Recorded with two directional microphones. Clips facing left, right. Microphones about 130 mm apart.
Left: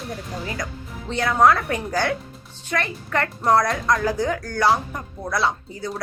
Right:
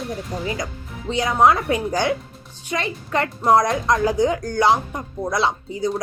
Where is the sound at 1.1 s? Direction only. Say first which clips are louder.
Right 1 dB; 15° right (ahead or behind).